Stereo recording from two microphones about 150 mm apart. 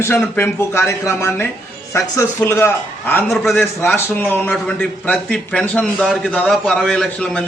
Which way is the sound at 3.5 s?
15° left (ahead or behind).